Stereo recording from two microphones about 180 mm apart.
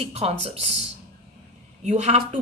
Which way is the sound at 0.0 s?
35° right (ahead or behind).